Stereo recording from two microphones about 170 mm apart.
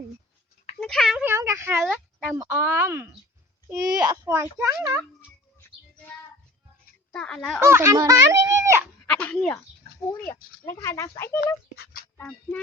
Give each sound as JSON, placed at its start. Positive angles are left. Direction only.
{"t": 0.8, "sound": "speech", "side_deg": 5}
{"t": 1.2, "sound": "speech", "side_deg": -15}
{"t": 1.9, "sound": "speech", "side_deg": 0}
{"t": 2.4, "sound": "a woman's voice", "side_deg": -15}
{"t": 7.1, "sound": "a child's voice", "side_deg": 5}
{"t": 7.6, "sound": "speech", "side_deg": -15}
{"t": 9.0, "sound": "a sound", "side_deg": 5}
{"t": 10.7, "sound": "speech", "side_deg": 15}